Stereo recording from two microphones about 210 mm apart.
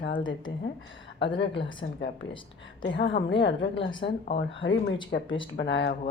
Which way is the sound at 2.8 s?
60° left (ahead or behind).